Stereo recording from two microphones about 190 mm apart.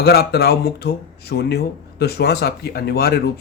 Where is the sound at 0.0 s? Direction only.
55° left (ahead or behind).